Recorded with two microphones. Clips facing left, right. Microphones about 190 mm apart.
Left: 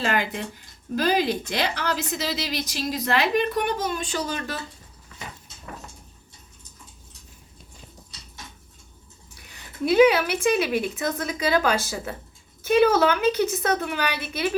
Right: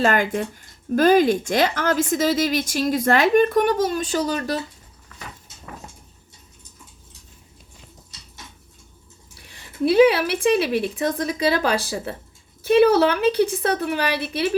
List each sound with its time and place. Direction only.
0.0 s speech: 50° right (ahead or behind)
9.3 s speech: 30° right (ahead or behind)